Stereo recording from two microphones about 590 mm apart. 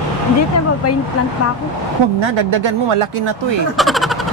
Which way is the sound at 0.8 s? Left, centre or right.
Left.